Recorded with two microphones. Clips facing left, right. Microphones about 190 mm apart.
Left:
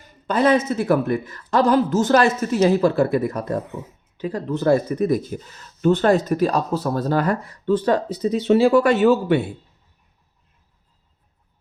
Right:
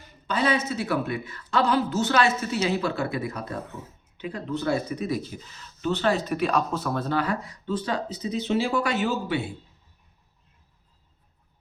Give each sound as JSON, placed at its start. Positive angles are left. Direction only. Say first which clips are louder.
{"t": 0.0, "sound": "speech", "louder": "left 7 dB", "side_deg": 45}